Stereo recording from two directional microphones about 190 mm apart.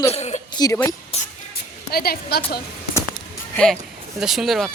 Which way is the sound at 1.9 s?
55° left (ahead or behind).